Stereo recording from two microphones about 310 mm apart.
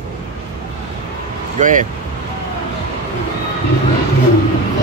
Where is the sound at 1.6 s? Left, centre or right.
Right.